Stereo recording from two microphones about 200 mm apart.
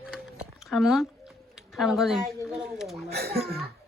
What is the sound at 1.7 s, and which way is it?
A woman's voice, centre (ahead or behind).